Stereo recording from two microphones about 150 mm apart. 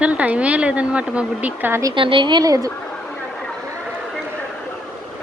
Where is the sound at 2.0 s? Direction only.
35° right (ahead or behind).